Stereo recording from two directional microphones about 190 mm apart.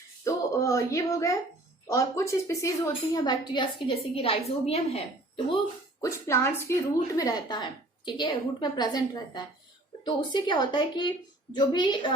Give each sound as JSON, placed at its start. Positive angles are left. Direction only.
{"t": 0.3, "sound": "a woman's voice", "side_deg": 15}
{"t": 6.0, "sound": "a woman's voice", "side_deg": 15}